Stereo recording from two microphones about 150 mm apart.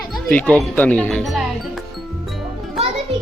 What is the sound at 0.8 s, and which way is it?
Speech, 10° left (ahead or behind).